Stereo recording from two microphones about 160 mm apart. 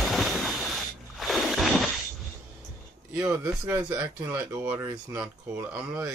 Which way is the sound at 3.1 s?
20° right (ahead or behind).